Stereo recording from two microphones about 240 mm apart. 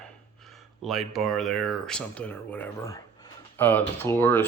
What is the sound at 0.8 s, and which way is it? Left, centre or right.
Speech, centre.